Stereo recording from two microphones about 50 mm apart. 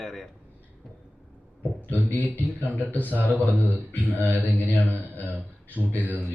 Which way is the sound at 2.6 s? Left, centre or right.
Left.